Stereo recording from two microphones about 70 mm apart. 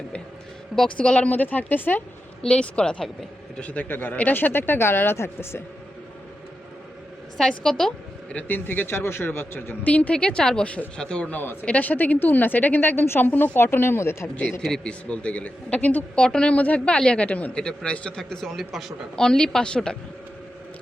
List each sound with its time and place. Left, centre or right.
0.9 s a woman's voice: centre
2.5 s speech: centre
3.6 s speech: left
7.3 s a woman's voice: centre
8.4 s a woman's voice: left
14.6 s speech: centre
19.2 s speech: centre